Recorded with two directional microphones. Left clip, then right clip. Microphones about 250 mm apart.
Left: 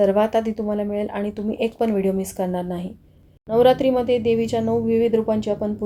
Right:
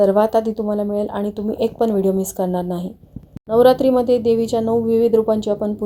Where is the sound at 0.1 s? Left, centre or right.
Centre.